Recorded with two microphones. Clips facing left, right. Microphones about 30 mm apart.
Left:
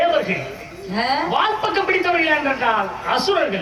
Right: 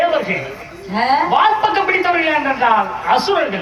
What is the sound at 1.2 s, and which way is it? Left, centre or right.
A woman's voice, centre.